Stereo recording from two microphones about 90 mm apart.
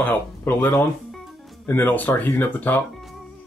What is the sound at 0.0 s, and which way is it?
Speech, 20° left (ahead or behind).